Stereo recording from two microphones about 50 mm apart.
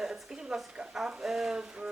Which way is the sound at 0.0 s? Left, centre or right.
Centre.